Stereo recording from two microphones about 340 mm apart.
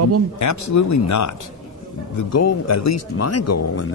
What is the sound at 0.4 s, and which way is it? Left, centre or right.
A man's voice, left.